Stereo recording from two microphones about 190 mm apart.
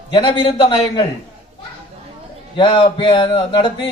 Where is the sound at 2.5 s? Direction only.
25° left (ahead or behind).